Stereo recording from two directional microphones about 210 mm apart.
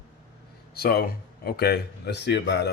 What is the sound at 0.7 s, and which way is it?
Speech, 45° left (ahead or behind).